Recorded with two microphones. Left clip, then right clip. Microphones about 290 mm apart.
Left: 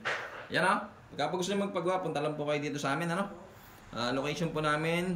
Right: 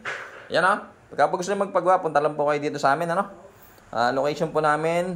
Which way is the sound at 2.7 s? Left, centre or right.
Centre.